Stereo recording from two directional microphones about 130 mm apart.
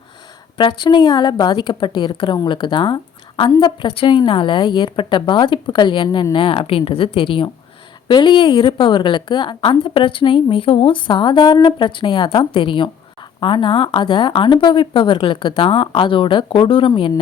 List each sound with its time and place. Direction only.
0.5 s a woman's voice: 40° left (ahead or behind)